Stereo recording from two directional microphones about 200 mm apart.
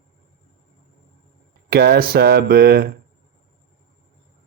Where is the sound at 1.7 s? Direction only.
55° right (ahead or behind).